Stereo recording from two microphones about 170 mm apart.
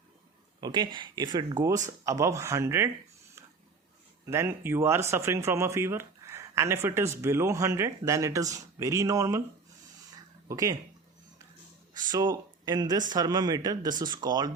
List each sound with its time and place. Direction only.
0.6 s speech: 25° right (ahead or behind)
4.3 s speech: 15° right (ahead or behind)
10.5 s speech: 20° right (ahead or behind)
11.9 s speech: 25° right (ahead or behind)